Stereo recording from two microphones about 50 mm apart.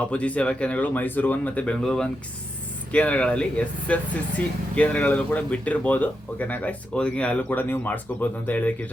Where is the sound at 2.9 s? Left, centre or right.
Left.